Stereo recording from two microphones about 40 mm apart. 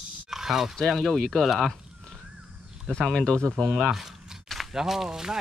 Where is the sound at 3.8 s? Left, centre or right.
Centre.